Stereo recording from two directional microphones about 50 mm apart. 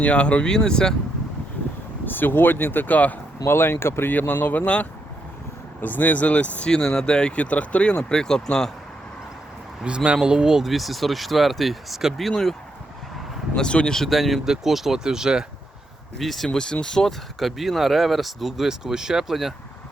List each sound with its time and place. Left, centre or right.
0.0 s speech: left
2.0 s speech: left
3.4 s speech: left
4.1 s speech: left
4.6 s speech: left
5.8 s speech: left
6.7 s speech: centre
9.8 s speech: right; by 12.3 s centre
12.3 s speech: centre
13.6 s speech: centre
13.9 s speech: centre
16.1 s speech: centre
16.5 s speech: centre